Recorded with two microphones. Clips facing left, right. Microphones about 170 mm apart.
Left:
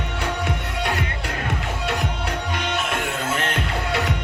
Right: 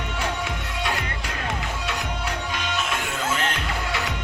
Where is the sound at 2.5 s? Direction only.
60° left (ahead or behind).